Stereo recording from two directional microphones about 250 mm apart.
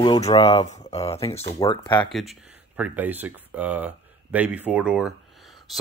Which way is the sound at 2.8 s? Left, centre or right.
Centre.